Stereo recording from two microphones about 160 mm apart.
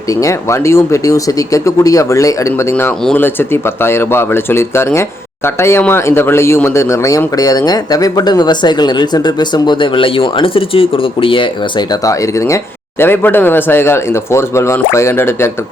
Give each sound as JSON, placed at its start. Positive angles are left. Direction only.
{"t": 0.2, "sound": "speech", "side_deg": 20}
{"t": 13.0, "sound": "speech", "side_deg": 15}